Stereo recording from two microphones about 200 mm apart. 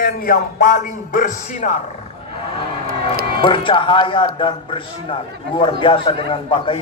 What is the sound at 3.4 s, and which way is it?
A man's voice, 25° left (ahead or behind).